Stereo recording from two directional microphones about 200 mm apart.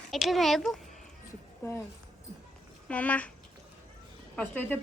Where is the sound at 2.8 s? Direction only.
5° left (ahead or behind).